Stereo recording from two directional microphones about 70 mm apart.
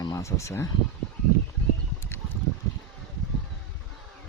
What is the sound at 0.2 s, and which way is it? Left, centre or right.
Speech, left.